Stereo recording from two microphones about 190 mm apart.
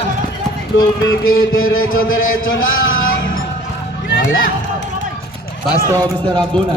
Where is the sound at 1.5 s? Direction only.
90° left.